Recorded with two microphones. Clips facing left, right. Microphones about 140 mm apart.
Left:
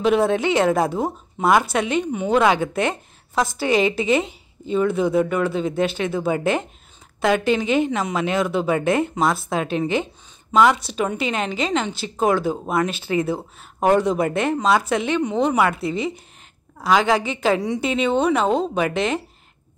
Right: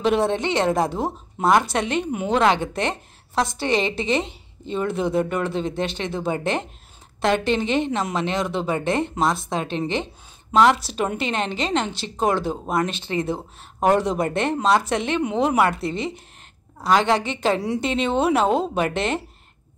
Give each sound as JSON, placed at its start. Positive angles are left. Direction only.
{"t": 0.0, "sound": "speech", "side_deg": 0}
{"t": 8.7, "sound": "speech", "side_deg": -25}
{"t": 9.0, "sound": "speech", "side_deg": 5}